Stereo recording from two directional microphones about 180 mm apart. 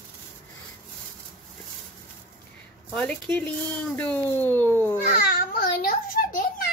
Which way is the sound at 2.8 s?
5° left (ahead or behind).